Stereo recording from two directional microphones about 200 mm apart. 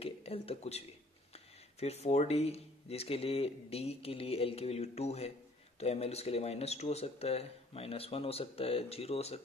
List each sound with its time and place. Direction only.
0.0 s speech: 30° left (ahead or behind)